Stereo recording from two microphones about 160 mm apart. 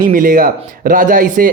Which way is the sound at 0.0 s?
60° right (ahead or behind).